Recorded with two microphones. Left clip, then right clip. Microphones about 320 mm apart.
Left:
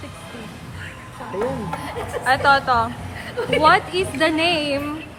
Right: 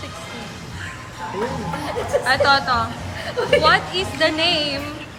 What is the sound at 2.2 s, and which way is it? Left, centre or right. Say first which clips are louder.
Speech: left 1 dB; centre.